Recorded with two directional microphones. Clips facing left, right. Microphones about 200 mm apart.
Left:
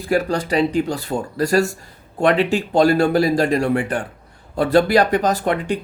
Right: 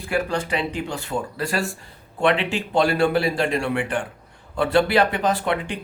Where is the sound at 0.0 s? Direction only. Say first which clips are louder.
Left 4 dB; 40° left (ahead or behind).